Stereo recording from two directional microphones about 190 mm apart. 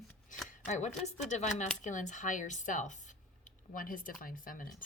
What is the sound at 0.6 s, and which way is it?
Speech, 40° left (ahead or behind).